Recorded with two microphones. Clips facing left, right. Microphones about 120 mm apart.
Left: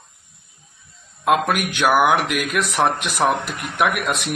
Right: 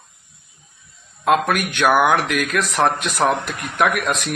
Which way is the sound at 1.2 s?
10° left (ahead or behind).